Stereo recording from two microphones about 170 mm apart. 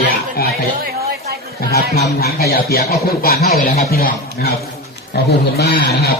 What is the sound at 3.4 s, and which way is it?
Speech, 40° left (ahead or behind).